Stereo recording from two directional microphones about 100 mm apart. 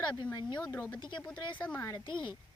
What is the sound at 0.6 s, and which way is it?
Speech, 15° left (ahead or behind).